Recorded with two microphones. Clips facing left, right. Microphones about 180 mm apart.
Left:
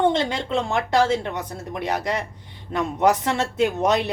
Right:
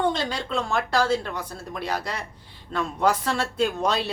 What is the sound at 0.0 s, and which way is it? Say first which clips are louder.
Speech: left 4 dB; 20° left (ahead or behind).